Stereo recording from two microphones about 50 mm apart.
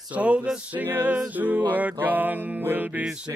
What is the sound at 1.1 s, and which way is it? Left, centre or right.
Music, right.